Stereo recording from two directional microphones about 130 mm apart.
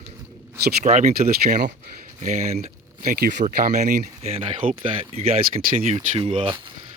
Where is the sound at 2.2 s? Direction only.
65° right (ahead or behind); by 6.5 s 45° right (ahead or behind).